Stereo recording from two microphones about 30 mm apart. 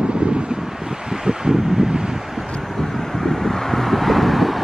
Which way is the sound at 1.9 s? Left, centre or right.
Right.